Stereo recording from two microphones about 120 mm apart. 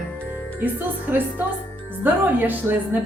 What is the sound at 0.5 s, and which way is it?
A woman's voice, 15° right (ahead or behind).